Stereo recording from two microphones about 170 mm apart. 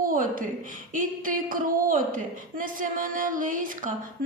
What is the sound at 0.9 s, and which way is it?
A woman's voice, 55° right (ahead or behind).